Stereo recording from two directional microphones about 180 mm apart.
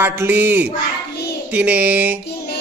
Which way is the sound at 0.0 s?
10° right (ahead or behind).